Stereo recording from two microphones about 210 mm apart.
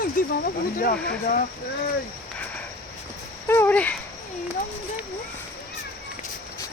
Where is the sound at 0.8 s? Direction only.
45° left (ahead or behind).